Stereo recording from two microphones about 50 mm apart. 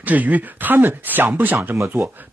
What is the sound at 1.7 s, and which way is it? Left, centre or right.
Speech, right.